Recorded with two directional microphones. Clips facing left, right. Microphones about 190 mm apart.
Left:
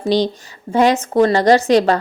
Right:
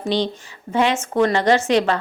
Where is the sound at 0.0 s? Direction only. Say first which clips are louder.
Left 5 dB; 40° left (ahead or behind).